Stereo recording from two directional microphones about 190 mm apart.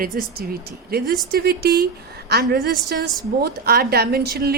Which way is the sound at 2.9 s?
55° right (ahead or behind).